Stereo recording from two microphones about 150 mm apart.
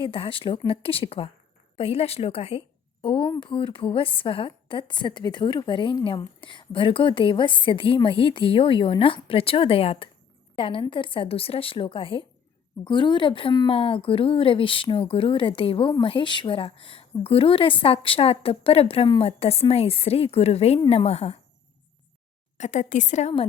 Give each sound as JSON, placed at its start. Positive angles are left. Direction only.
{"t": 0.0, "sound": "a woman's voice", "side_deg": 35}
{"t": 22.5, "sound": "a woman's voice", "side_deg": 50}